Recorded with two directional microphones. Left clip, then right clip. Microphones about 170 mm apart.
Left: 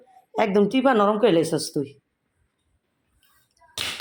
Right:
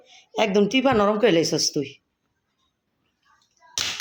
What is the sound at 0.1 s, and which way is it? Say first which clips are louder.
Speech: even; 5° left (ahead or behind).